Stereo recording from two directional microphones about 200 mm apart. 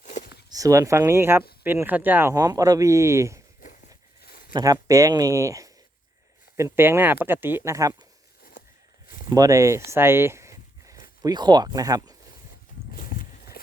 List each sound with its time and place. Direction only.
0.0 s a sound: 35° left (ahead or behind)
0.5 s speech: 15° right (ahead or behind)
4.2 s a sound: 50° left (ahead or behind)
4.5 s speech: 15° right (ahead or behind)
6.7 s speech: 10° right (ahead or behind)
9.3 s speech: 15° right (ahead or behind)
9.9 s a sound: 10° right (ahead or behind)
11.2 s speech: 20° right (ahead or behind)
12.9 s livestock: 45° left (ahead or behind)